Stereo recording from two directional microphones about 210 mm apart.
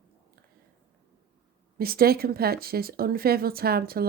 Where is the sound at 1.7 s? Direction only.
45° right (ahead or behind).